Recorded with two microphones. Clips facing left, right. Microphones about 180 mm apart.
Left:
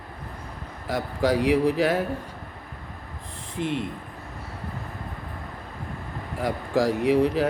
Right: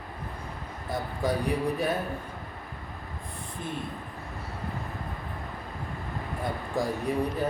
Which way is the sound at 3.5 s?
90° left.